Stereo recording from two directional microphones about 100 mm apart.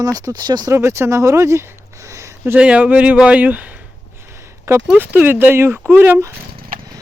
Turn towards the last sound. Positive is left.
turn(degrees=-25)  # may be behind; listen again after turning